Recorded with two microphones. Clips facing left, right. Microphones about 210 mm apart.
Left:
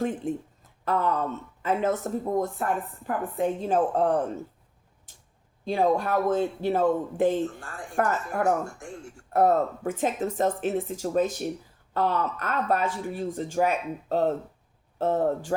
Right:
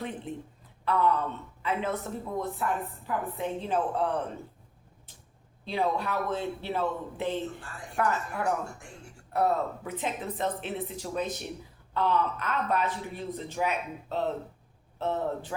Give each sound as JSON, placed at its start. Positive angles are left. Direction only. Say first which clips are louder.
{"t": 0.0, "sound": "a man's voice", "louder": "left 8 dB", "side_deg": 45}
{"t": 5.6, "sound": "a man's voice", "louder": "left 6 dB", "side_deg": 45}